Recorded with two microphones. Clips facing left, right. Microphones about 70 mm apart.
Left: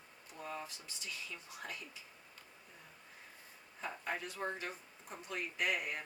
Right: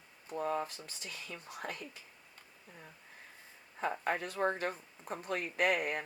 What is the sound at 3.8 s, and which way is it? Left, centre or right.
Speech, right.